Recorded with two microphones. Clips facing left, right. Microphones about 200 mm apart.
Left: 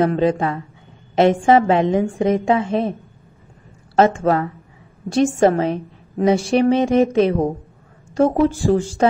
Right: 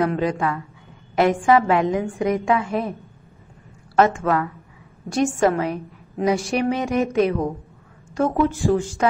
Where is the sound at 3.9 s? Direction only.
30° left (ahead or behind).